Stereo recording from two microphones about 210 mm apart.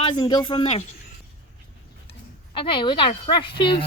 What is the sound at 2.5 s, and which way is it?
Speech, 25° left (ahead or behind).